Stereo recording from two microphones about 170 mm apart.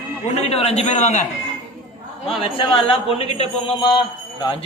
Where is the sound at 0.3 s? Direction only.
40° left (ahead or behind).